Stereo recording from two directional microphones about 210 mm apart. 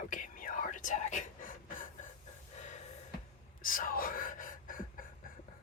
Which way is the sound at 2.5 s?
35° left (ahead or behind).